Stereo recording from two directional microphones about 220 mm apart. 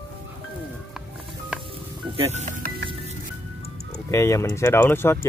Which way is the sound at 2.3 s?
35° right (ahead or behind).